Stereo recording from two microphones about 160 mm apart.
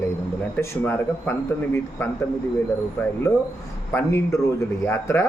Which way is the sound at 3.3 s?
15° left (ahead or behind).